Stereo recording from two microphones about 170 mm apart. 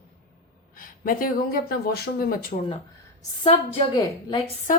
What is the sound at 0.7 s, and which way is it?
Speech, 55° left (ahead or behind).